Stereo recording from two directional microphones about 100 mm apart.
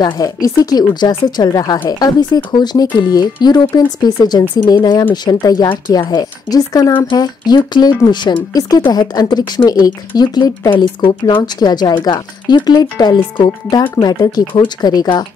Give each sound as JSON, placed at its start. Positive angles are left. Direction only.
{"t": 0.0, "sound": "speech", "side_deg": 40}
{"t": 11.0, "sound": "speech", "side_deg": 60}